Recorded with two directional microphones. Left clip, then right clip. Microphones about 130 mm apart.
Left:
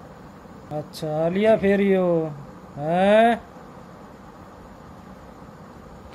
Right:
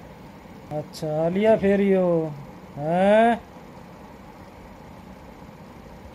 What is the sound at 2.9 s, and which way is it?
Speech, 25° right (ahead or behind).